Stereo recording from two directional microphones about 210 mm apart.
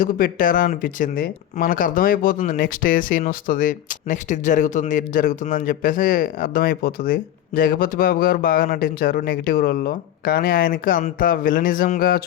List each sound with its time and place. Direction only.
0.0 s speech: 40° left (ahead or behind)